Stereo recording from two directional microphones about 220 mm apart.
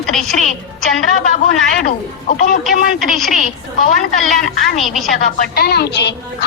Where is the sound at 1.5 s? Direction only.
35° left (ahead or behind).